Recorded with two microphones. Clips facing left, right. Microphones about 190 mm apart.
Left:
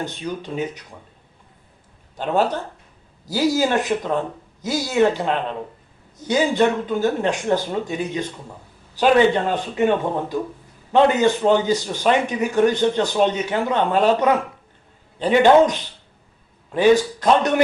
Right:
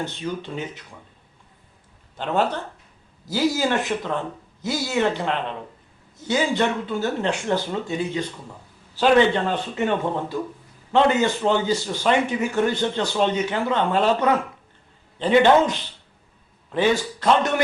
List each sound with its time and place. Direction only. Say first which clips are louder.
0.0 s a man's voice: left 1 dB; 15° left (ahead or behind)
2.1 s a man's voice: left 3 dB; 15° left (ahead or behind)
3.6 s a man's voice: left 3 dB; 15° left (ahead or behind)
16.7 s a man's voice: left 6 dB; 15° left (ahead or behind)